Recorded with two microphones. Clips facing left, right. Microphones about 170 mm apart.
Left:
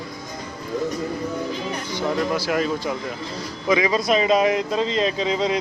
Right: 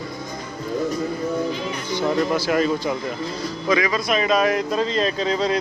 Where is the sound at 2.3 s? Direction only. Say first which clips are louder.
Right 2 dB; 5° left (ahead or behind).